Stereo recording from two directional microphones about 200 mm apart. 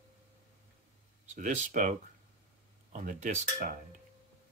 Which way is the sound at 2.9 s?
40° right (ahead or behind).